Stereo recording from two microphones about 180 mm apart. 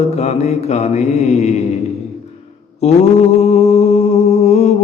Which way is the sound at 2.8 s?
40° left (ahead or behind).